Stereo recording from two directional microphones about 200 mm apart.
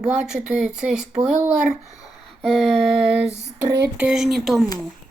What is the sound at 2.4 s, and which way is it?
Speech, centre (ahead or behind).